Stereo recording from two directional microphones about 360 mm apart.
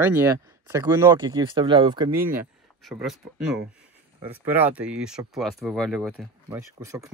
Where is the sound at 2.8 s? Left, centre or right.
Centre.